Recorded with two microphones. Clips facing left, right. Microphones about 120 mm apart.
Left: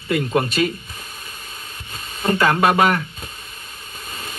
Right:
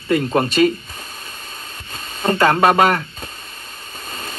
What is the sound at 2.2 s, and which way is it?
Speech, 30° right (ahead or behind).